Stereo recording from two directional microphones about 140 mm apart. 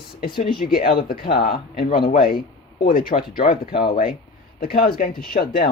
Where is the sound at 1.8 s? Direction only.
75° left (ahead or behind).